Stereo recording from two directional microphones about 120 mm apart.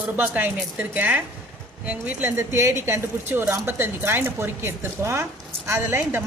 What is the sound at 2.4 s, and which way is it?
A woman's voice, 25° right (ahead or behind).